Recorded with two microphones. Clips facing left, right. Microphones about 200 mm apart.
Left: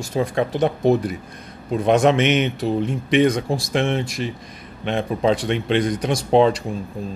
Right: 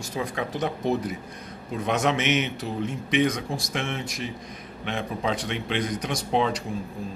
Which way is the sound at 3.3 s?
30° left (ahead or behind).